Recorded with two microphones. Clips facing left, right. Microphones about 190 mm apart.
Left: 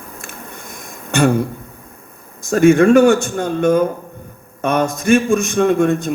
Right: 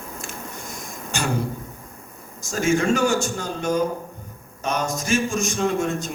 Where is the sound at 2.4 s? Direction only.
60° left (ahead or behind).